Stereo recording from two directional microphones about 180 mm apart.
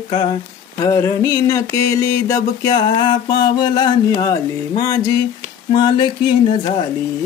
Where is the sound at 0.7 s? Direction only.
20° left (ahead or behind).